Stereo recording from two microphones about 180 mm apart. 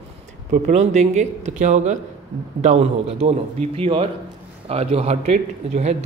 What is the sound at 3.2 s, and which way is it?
Speech, 35° right (ahead or behind).